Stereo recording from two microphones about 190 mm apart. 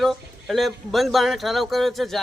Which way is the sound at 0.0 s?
Centre (ahead or behind).